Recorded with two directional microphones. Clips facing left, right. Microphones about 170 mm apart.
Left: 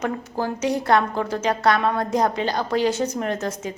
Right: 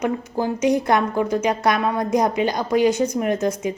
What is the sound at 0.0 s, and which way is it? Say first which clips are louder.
A woman's voice: right 3 dB; 15° right (ahead or behind).